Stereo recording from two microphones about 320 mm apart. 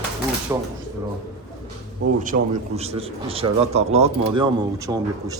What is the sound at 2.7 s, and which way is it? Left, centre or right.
Speech, centre.